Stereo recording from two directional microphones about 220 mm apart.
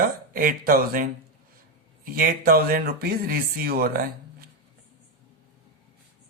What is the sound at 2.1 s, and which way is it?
Speech, 40° right (ahead or behind).